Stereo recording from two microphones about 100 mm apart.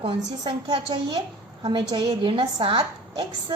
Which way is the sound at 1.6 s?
45° right (ahead or behind).